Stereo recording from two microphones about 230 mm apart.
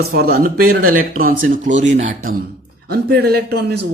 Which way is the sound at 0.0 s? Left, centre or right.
Right.